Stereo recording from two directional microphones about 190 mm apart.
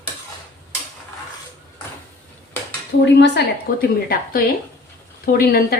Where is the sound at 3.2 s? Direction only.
60° left (ahead or behind).